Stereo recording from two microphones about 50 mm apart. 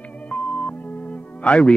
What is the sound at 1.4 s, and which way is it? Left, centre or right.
Speech, centre.